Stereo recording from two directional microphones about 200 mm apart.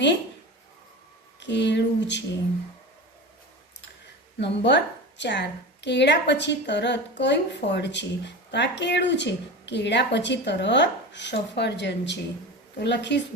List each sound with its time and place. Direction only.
1.4 s a woman's voice: 60° left (ahead or behind)
4.4 s a woman's voice: 60° left (ahead or behind)